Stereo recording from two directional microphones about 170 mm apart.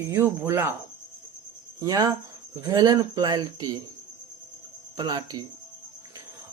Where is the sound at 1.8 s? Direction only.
20° right (ahead or behind).